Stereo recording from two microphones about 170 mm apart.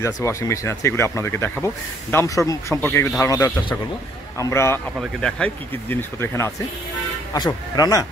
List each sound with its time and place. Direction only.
0.0 s speech: 15° left (ahead or behind)
7.3 s speech: 25° left (ahead or behind)